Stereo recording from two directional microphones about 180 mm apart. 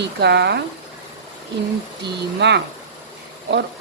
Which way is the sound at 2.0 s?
75° right (ahead or behind).